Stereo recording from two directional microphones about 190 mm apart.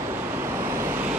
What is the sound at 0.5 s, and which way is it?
Waves, 15° right (ahead or behind).